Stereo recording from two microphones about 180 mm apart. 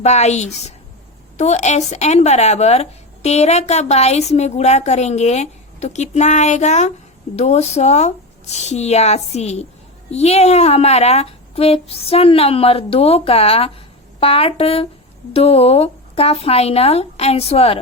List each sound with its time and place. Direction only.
0.0 s a woman's voice: 40° left (ahead or behind)